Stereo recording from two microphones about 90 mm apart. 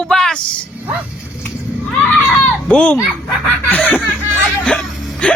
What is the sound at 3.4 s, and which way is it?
Speech, 15° left (ahead or behind).